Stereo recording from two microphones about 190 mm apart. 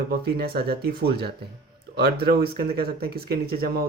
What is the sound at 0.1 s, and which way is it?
Speech, 55° right (ahead or behind).